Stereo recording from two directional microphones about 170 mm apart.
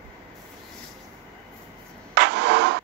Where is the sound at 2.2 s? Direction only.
90° right.